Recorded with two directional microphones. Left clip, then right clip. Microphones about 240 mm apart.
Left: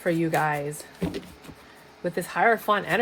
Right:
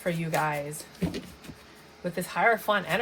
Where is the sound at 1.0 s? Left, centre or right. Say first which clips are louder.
Left 2 dB; left.